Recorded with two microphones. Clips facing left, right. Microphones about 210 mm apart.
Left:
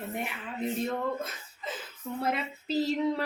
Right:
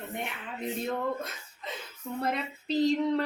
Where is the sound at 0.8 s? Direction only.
Centre (ahead or behind).